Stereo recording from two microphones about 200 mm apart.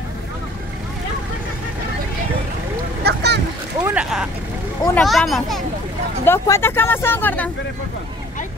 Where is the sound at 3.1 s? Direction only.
55° right (ahead or behind).